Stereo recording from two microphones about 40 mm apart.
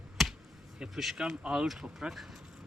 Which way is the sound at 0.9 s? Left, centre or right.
Centre.